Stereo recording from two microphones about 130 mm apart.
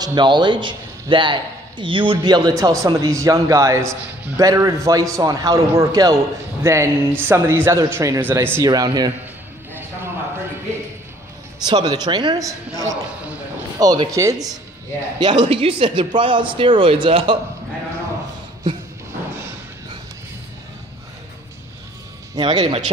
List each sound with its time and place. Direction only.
0.0 s a man's voice: 35° right (ahead or behind)
11.6 s speech: 30° right (ahead or behind)
15.1 s speech: 35° right (ahead or behind)
22.3 s a man's voice: 35° right (ahead or behind)